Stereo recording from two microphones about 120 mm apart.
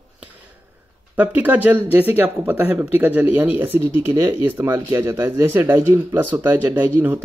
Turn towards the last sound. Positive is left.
turn(degrees=-15)  # may be behind; listen again after turning